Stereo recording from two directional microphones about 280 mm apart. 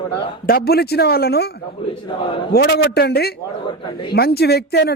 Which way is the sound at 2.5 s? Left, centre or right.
Left.